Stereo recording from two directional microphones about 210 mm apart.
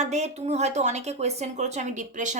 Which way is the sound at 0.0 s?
30° right (ahead or behind).